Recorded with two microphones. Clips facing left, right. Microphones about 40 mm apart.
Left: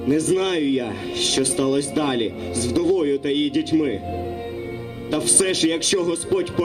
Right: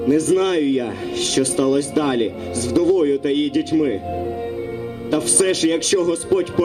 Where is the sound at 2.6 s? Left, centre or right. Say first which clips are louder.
Right 3 dB; left.